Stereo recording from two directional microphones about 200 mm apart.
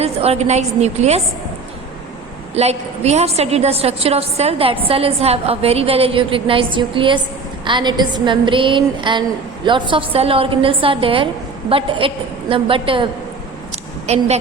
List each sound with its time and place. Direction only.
0.0 s a woman's voice: 30° right (ahead or behind)
2.6 s a woman's voice: 30° right (ahead or behind)
14.1 s a woman's voice: 35° right (ahead or behind)